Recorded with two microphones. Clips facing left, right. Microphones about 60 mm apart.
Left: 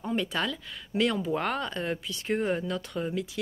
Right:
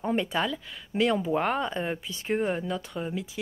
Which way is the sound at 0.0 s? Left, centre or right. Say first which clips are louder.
Right 2 dB; right.